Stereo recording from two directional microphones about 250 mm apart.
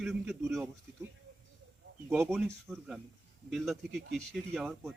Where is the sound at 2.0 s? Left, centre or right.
Centre.